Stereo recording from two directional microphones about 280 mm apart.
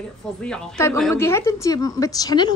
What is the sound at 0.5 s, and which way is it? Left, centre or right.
A woman's voice, centre.